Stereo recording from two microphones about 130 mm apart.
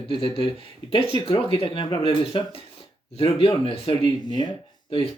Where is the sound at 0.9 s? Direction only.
45° left (ahead or behind).